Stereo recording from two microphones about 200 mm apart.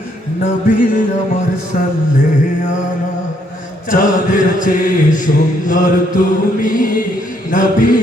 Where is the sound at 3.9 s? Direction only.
40° left (ahead or behind).